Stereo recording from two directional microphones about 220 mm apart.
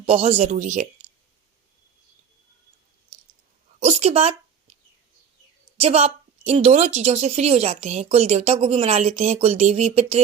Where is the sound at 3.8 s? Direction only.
30° right (ahead or behind).